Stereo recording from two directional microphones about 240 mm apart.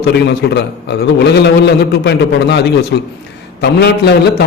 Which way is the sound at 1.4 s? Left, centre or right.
Left.